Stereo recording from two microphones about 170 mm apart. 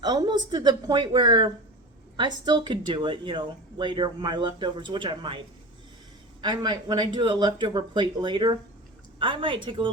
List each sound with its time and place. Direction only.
0.0 s speech: 25° right (ahead or behind)
6.4 s speech: 25° right (ahead or behind)